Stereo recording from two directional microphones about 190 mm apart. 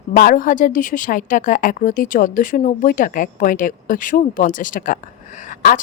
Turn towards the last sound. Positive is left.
turn(degrees=45)  # may be behind; listen again after turning